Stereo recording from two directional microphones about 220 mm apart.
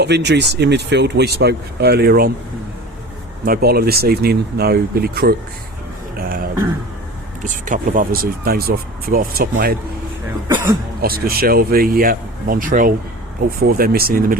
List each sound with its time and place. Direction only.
0.0 s speech: 50° right (ahead or behind)
3.4 s speech: 45° right (ahead or behind)
6.1 s throat clearing: 40° right (ahead or behind)
7.4 s speech: 35° right (ahead or behind)
11.0 s speech: 45° right (ahead or behind)